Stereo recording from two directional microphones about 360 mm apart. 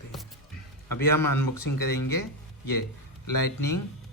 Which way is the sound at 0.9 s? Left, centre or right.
Left.